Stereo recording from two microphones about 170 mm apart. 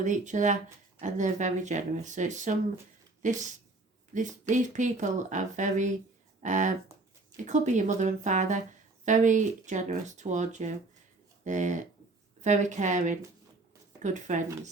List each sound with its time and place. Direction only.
0.0 s speech: 45° right (ahead or behind)